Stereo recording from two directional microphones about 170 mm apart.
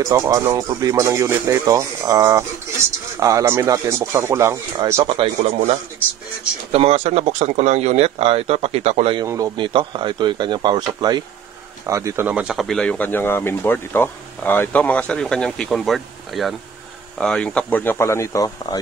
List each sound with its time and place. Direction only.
0.1 s speech: 15° right (ahead or behind)
5.0 s speech: 35° right (ahead or behind)
9.2 s a man's voice: 20° right (ahead or behind); by 18.8 s 20° left (ahead or behind)